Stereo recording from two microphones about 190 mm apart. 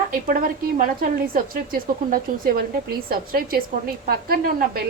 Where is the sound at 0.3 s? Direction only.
45° right (ahead or behind).